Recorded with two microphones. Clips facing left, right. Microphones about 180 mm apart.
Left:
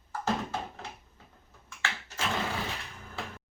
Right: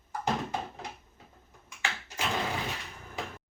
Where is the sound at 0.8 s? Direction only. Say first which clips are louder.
Right 2 dB; 15° right (ahead or behind).